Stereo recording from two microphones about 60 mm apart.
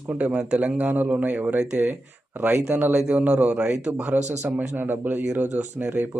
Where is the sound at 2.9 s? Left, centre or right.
Right.